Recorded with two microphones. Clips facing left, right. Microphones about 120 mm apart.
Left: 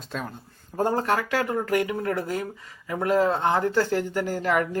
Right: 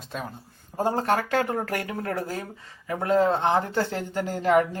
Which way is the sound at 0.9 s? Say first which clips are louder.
Right 1 dB; 40° right (ahead or behind).